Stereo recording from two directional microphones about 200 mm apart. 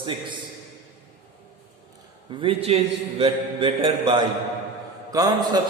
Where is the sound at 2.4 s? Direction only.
30° right (ahead or behind).